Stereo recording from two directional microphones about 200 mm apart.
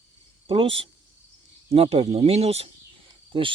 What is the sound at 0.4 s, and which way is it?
Speech, 30° right (ahead or behind).